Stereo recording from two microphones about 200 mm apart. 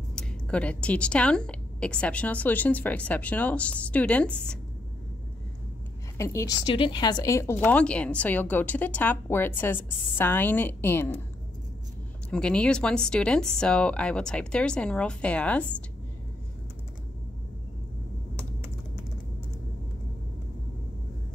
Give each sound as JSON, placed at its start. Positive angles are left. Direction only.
{"t": 0.1, "sound": "a woman's voice", "side_deg": 5}
{"t": 6.1, "sound": "a woman's voice", "side_deg": 15}
{"t": 6.6, "sound": "a woman's voice", "side_deg": 25}
{"t": 12.3, "sound": "speech", "side_deg": 5}